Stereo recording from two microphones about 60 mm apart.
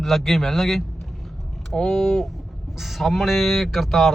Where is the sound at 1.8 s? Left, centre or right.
Centre.